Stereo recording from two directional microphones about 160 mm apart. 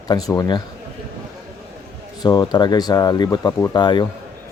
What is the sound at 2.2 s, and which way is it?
Speech, 25° left (ahead or behind).